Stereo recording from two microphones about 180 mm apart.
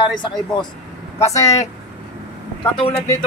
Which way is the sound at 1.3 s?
40° left (ahead or behind).